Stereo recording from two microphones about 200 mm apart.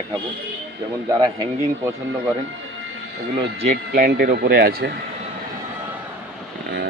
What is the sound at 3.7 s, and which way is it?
Speech, 50° right (ahead or behind).